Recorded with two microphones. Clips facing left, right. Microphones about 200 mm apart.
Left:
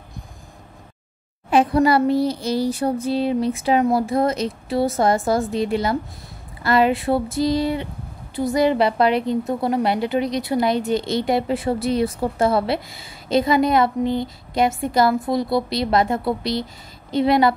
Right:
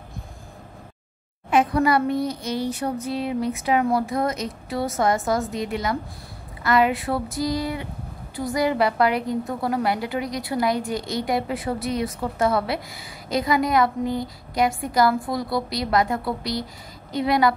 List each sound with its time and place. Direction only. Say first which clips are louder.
1.5 s a woman's voice: left 3 dB; 30° left (ahead or behind)